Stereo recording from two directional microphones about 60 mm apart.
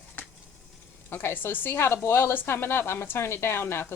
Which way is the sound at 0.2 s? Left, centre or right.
Left.